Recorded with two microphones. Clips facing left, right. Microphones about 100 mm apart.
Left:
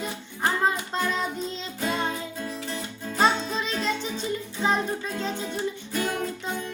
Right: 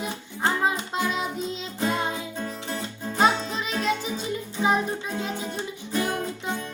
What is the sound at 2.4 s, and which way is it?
Music, 45° right (ahead or behind).